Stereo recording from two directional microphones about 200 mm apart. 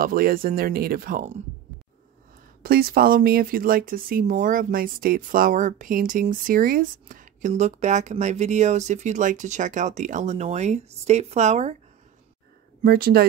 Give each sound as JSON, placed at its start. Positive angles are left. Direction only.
{"t": 0.0, "sound": "speech", "side_deg": -45}
{"t": 2.6, "sound": "speech", "side_deg": -50}
{"t": 12.8, "sound": "speech", "side_deg": -45}